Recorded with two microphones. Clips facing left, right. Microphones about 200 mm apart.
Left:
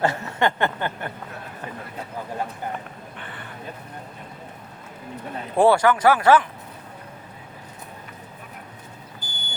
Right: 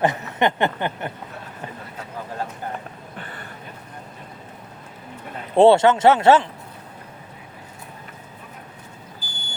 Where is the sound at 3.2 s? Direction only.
40° right (ahead or behind).